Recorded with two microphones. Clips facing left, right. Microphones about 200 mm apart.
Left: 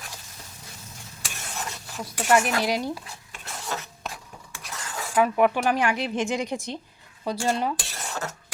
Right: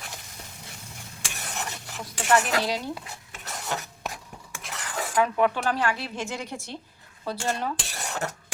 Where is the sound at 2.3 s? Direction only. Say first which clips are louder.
Left 2 dB; 10° left (ahead or behind).